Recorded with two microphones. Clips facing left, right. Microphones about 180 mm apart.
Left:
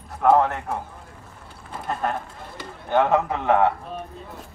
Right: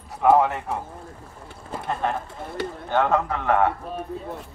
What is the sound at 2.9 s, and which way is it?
Speech, 15° left (ahead or behind).